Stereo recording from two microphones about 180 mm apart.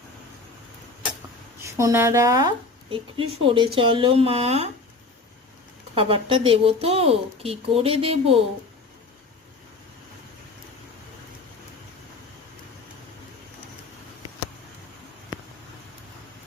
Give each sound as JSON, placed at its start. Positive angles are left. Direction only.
{"t": 1.6, "sound": "a woman's voice", "side_deg": -15}
{"t": 5.9, "sound": "a woman's voice", "side_deg": -30}